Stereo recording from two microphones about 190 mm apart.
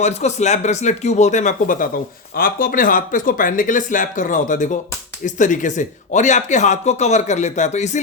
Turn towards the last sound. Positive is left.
turn(degrees=35)  # may be behind; listen again after turning